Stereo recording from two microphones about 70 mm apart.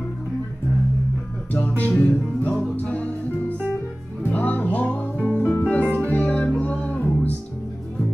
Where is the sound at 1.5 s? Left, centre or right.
Left.